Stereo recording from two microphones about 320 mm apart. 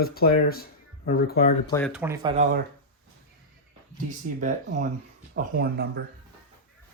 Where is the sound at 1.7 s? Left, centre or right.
Centre.